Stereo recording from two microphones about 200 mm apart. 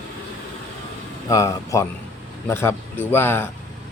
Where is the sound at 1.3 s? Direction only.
15° left (ahead or behind).